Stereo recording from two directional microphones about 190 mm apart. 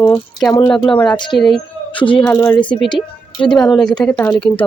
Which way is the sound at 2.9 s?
25° left (ahead or behind).